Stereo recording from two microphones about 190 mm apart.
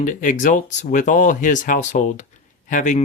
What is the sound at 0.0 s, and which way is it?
Speech, 40° left (ahead or behind).